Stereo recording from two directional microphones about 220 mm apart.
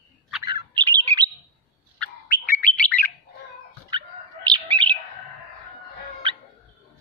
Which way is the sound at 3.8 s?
20° right (ahead or behind).